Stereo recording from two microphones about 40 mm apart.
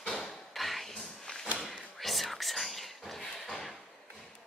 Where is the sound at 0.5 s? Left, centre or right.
Centre.